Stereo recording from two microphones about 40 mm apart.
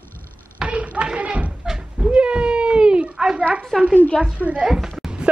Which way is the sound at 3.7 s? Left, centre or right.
Centre.